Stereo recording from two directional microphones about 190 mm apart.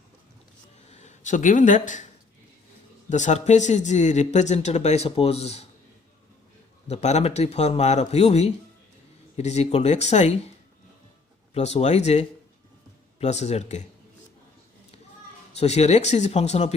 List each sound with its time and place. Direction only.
0.9 s speech: 40° left (ahead or behind)
3.1 s speech: 40° left (ahead or behind)
6.8 s speech: 35° left (ahead or behind)
11.5 s speech: 35° left (ahead or behind)
15.5 s speech: 35° left (ahead or behind)